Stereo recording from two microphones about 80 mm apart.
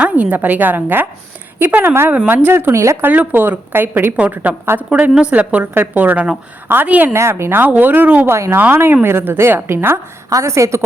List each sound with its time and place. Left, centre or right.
0.0 s a woman's voice: centre; by 3.1 s right
3.1 s a woman's voice: right
4.9 s a woman's voice: centre
7.1 s a woman's voice: right
10.2 s a woman's voice: right